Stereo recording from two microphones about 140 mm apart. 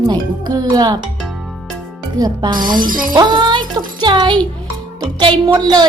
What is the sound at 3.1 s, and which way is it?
A woman's voice, 30° right (ahead or behind).